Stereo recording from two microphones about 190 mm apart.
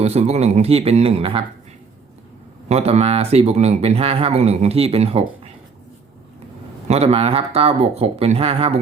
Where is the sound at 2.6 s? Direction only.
35° right (ahead or behind).